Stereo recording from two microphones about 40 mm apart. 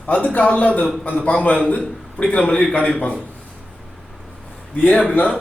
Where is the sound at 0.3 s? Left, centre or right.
Left.